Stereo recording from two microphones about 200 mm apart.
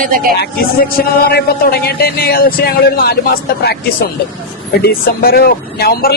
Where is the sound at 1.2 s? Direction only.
50° left (ahead or behind).